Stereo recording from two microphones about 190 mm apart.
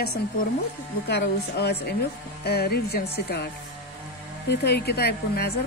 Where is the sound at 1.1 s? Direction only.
60° left (ahead or behind).